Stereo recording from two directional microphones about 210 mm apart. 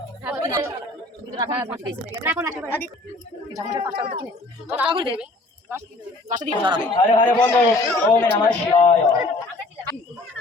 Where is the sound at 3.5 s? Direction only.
20° right (ahead or behind).